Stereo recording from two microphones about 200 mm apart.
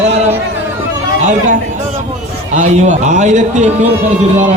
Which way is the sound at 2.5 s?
35° right (ahead or behind).